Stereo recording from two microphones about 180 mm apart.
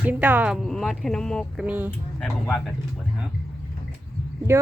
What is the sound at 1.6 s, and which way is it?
Speech, 5° right (ahead or behind).